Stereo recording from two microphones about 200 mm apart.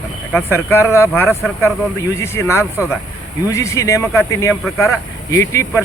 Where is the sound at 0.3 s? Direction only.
10° left (ahead or behind).